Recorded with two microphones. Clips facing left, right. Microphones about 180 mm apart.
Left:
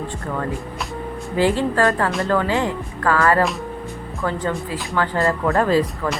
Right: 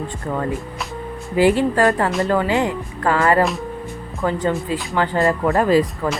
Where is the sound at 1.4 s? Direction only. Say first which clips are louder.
Right 3 dB; 15° right (ahead or behind).